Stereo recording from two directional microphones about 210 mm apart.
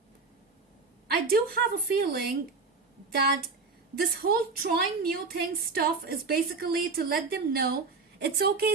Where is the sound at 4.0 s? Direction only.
45° right (ahead or behind).